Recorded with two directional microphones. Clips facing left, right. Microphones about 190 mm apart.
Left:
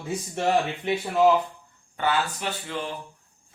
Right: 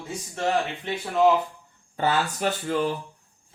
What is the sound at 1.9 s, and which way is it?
Speech, 40° right (ahead or behind).